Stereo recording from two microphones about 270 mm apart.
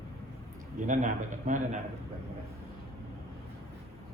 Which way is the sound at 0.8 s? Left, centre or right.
Right.